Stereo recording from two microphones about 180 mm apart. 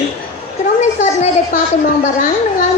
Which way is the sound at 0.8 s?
40° left (ahead or behind).